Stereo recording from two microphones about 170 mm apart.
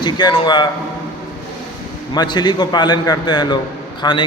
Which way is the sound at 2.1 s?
25° left (ahead or behind).